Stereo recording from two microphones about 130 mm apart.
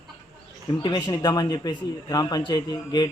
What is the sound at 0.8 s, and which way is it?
A man's voice, 35° left (ahead or behind).